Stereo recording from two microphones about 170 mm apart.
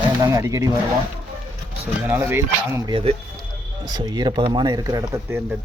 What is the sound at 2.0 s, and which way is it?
Speech, 15° right (ahead or behind).